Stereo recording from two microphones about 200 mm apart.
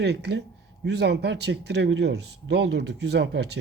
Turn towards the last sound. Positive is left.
turn(degrees=-55)  # may be behind; listen again after turning